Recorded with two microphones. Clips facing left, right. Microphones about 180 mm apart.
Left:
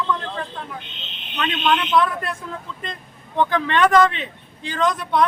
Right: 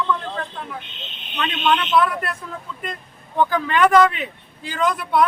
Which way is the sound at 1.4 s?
5° right (ahead or behind).